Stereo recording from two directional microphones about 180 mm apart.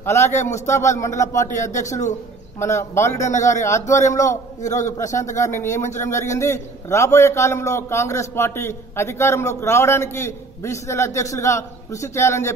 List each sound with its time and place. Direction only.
0.0 s a man's voice: 15° left (ahead or behind)
4.6 s a man's voice: 40° left (ahead or behind)
4.8 s a man's voice: 15° left (ahead or behind)